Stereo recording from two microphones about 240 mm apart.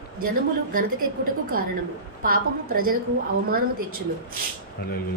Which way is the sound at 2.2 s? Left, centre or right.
Right.